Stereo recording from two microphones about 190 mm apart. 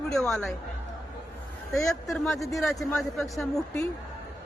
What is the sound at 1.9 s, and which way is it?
A man's voice, centre (ahead or behind).